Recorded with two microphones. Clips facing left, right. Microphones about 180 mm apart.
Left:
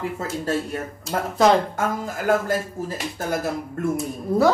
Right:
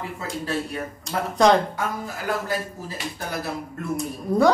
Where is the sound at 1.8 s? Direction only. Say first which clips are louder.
Left 4 dB; 45° left (ahead or behind).